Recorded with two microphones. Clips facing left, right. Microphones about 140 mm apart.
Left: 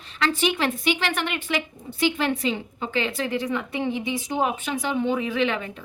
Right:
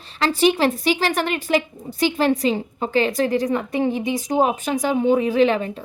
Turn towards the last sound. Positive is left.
turn(degrees=-35)  # may be behind; listen again after turning